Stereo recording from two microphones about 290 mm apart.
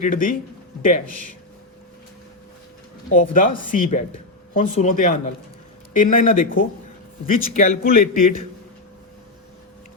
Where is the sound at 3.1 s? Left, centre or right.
Left.